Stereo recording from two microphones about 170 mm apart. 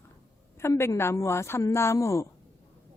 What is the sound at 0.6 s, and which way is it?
Speech, 15° left (ahead or behind).